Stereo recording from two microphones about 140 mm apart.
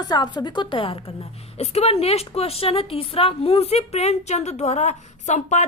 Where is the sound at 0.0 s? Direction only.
30° left (ahead or behind).